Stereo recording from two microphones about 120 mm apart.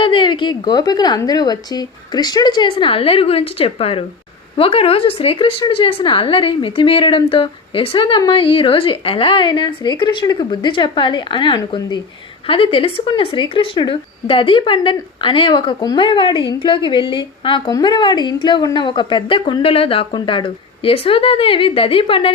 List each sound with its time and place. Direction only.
0.0 s a woman's voice: 45° left (ahead or behind)